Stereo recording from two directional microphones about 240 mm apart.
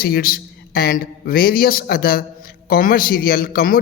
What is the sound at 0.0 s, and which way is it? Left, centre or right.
A man's voice, left.